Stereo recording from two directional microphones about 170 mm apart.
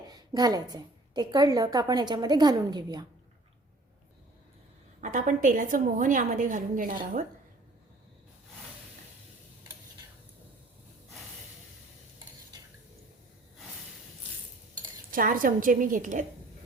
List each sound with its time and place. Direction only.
0.1 s a woman's voice: 20° right (ahead or behind)
4.9 s a woman's voice: 45° right (ahead or behind)
15.1 s a woman's voice: 55° right (ahead or behind)